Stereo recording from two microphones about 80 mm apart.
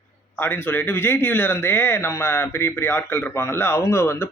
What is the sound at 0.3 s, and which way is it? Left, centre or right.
Speech, left.